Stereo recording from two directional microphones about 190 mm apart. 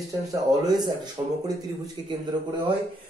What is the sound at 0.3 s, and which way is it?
A man's voice, 20° right (ahead or behind).